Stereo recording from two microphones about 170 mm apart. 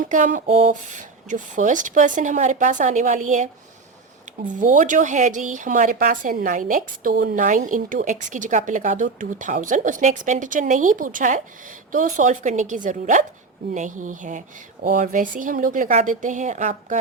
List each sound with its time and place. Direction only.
0.0 s speech: 50° right (ahead or behind)